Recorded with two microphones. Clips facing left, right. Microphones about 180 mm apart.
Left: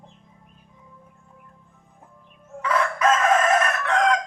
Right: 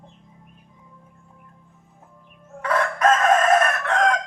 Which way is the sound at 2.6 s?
50° right (ahead or behind).